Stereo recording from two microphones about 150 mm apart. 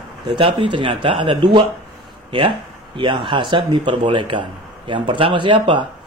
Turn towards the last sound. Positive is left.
turn(degrees=-35)  # may be behind; listen again after turning